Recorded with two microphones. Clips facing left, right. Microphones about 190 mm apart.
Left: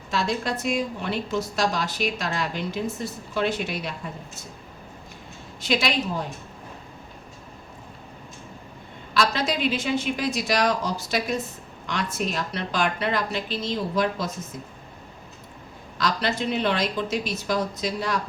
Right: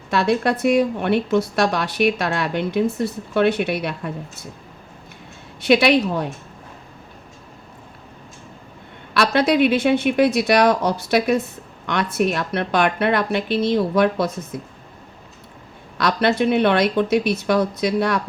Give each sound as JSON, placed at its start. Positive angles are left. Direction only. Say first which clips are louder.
{"t": 0.1, "sound": "a woman's voice", "louder": "right 7 dB", "side_deg": -65}
{"t": 5.5, "sound": "a woman's voice", "louder": "right 9 dB", "side_deg": -65}
{"t": 9.1, "sound": "a woman's voice", "louder": "right 7 dB", "side_deg": -65}
{"t": 16.0, "sound": "a woman's voice", "louder": "right 7 dB", "side_deg": -65}